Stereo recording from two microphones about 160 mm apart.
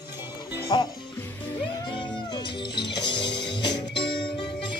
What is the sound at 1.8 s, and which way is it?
Music, 30° left (ahead or behind).